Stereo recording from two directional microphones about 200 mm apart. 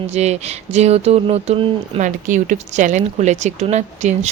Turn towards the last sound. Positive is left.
turn(degrees=-35)  # may be behind; listen again after turning